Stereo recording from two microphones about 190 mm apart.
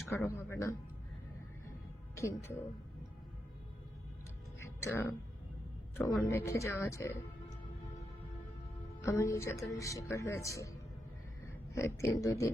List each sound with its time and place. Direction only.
0.3 s speech: 10° left (ahead or behind)
2.1 s speech: 15° left (ahead or behind)
4.6 s music: 15° left (ahead or behind)
6.0 s speech: 20° left (ahead or behind)
9.0 s speech: 15° left (ahead or behind)